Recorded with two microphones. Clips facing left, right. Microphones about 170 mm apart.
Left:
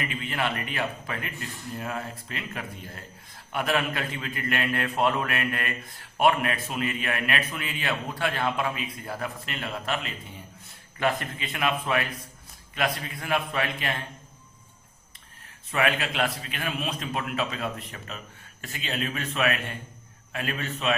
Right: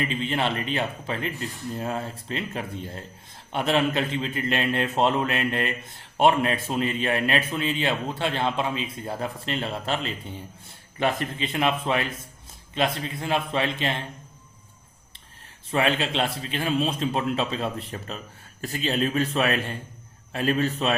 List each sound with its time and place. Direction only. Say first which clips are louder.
0.0 s speech: right 4 dB; 25° right (ahead or behind)
15.7 s speech: right 3 dB; 30° right (ahead or behind)